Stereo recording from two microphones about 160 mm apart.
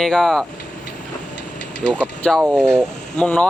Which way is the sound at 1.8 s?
5° left (ahead or behind).